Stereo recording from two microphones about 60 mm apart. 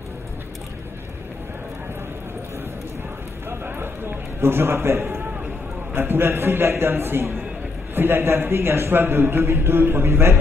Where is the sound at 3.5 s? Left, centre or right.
Right.